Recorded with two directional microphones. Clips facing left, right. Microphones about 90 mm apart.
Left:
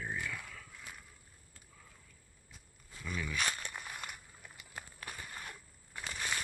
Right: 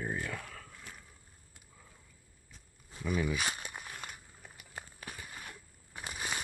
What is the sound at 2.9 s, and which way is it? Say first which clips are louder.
Walk: right 8 dB; 20° right (ahead or behind).